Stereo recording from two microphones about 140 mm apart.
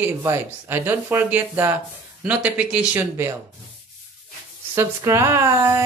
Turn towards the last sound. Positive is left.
turn(degrees=-20)  # may be behind; listen again after turning